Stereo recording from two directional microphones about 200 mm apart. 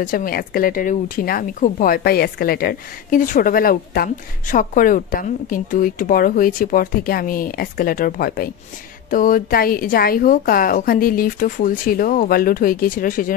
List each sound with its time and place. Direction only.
0.0 s speech: 45° left (ahead or behind)